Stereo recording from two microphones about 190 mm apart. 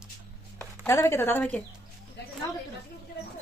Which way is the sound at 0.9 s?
15° left (ahead or behind).